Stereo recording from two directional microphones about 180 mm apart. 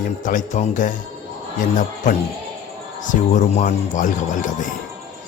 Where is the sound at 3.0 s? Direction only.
45° left (ahead or behind).